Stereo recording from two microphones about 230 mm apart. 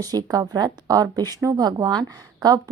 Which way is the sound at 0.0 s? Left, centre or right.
Centre.